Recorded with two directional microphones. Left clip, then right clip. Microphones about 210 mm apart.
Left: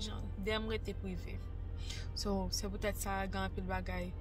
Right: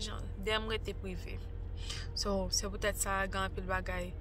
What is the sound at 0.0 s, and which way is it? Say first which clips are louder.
A woman's voice: right 2 dB; centre (ahead or behind).